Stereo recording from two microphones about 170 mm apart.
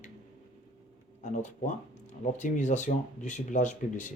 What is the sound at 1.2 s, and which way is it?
Speech, 45° left (ahead or behind).